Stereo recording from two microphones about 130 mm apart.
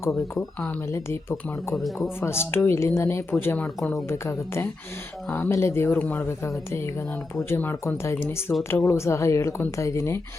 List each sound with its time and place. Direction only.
0.1 s speech: 5° left (ahead or behind)
0.9 s a woman's voice: 20° left (ahead or behind)